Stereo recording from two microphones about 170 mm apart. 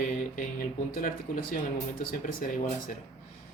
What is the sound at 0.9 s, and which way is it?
Speech, 55° left (ahead or behind).